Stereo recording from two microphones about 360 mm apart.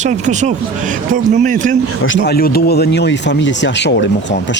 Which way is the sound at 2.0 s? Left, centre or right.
Left.